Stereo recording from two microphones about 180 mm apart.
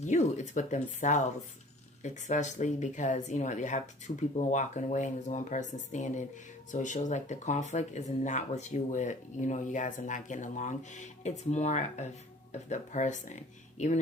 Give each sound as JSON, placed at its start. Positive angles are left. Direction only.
{"t": 0.0, "sound": "speech", "side_deg": 40}